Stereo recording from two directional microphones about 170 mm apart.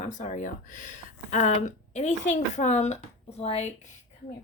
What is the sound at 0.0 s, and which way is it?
Speech, 45° left (ahead or behind).